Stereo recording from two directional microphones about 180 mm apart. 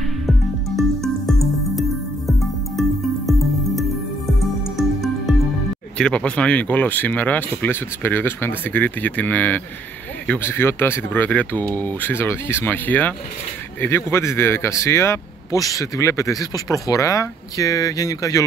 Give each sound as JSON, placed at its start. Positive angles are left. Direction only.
{"t": 0.0, "sound": "music", "side_deg": 0}
{"t": 5.9, "sound": "speech", "side_deg": 5}